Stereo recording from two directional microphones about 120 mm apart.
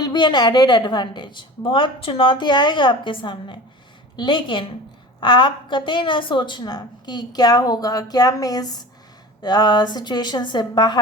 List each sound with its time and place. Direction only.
0.0 s a woman's voice: 40° left (ahead or behind)